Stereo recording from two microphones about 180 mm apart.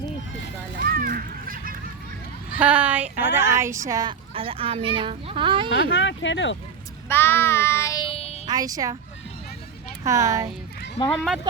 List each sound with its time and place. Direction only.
0.8 s children playing: 55° right (ahead or behind)
2.6 s a sound: 10° right (ahead or behind)
3.8 s a child's voice: 20° right (ahead or behind)
5.9 s speech: 90° left
7.1 s child singing: 15° left (ahead or behind); by 8.4 s 30° left (ahead or behind)
8.4 s a child's voice: 20° right (ahead or behind)
10.0 s a child's voice: 20° right (ahead or behind)